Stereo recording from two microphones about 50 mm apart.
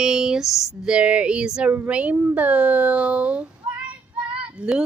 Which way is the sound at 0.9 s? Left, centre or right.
Right.